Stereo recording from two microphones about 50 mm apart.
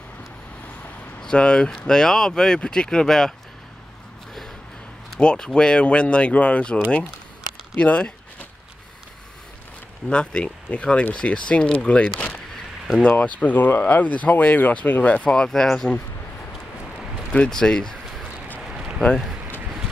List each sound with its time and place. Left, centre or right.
1.2 s speech: centre
5.2 s speech: centre
10.0 s speech: centre
15.2 s speech: centre
17.5 s speech: centre
18.7 s a sound: centre